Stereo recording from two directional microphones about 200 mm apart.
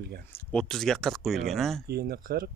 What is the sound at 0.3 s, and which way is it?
Speech, 5° left (ahead or behind).